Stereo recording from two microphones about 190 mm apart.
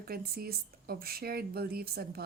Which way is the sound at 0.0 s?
55° right (ahead or behind).